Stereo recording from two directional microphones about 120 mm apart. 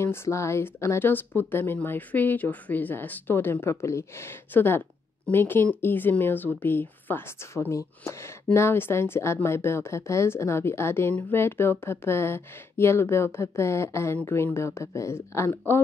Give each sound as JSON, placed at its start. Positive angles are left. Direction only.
{"t": 0.0, "sound": "speech", "side_deg": 20}